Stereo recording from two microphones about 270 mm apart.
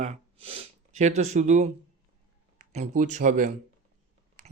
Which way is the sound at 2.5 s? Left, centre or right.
Right.